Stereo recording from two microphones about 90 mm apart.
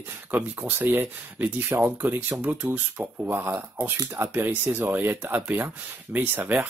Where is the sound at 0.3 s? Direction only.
20° right (ahead or behind).